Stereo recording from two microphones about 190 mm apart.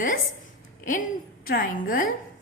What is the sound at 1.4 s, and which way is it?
Speech, 50° left (ahead or behind).